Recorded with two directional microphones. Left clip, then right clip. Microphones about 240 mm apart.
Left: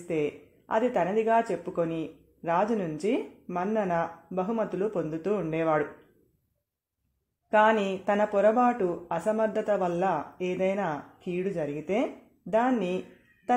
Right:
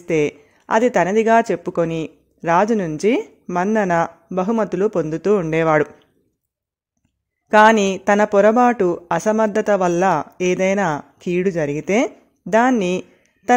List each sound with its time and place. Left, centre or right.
0.1 s speech: right
7.4 s speech: right